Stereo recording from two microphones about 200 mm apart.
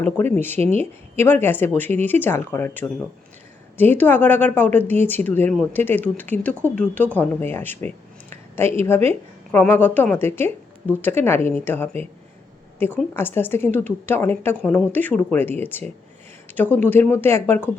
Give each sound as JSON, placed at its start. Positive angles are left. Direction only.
{"t": 0.0, "sound": "speech", "side_deg": 10}
{"t": 13.1, "sound": "speech", "side_deg": 10}